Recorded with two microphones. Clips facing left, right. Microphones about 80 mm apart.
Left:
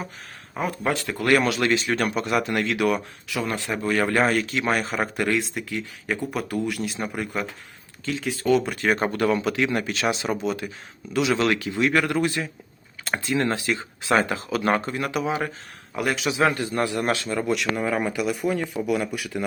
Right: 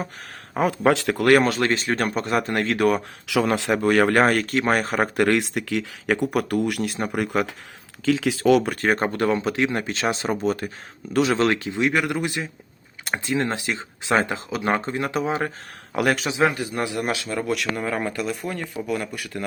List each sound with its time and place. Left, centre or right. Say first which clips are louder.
0.9 s speech: right 7 dB; right
1.3 s speech: right 2 dB; right
3.2 s speech: right 7 dB; right
3.8 s speech: right 3 dB; right
8.0 s speech: right 5 dB; right
8.6 s speech: right 1 dB; right
15.9 s speech: right 4 dB; right
16.5 s a man's voice: left 2 dB; centre